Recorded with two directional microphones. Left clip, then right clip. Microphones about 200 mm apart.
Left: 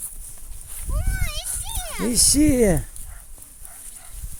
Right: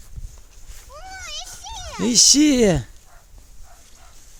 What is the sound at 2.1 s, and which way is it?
Speech, 30° right (ahead or behind).